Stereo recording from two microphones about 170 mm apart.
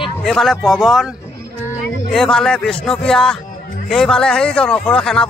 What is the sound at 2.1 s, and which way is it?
Speech, centre (ahead or behind).